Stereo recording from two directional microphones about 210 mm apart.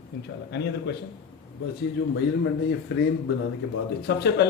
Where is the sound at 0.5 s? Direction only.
55° left (ahead or behind).